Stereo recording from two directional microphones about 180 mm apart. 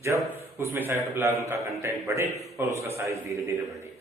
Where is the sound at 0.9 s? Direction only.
15° right (ahead or behind).